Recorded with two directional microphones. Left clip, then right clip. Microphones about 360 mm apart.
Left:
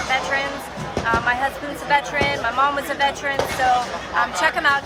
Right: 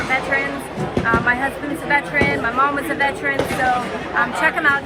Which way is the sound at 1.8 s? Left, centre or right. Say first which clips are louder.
Right 1 dB; centre.